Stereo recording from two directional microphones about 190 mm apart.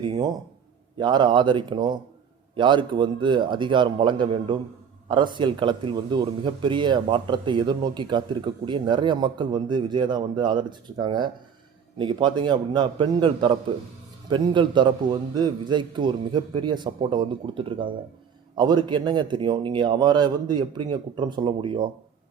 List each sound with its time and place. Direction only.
0.0 s speech: 20° right (ahead or behind)